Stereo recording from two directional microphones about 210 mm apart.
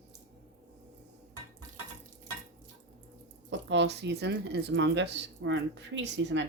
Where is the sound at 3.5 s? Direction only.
55° right (ahead or behind).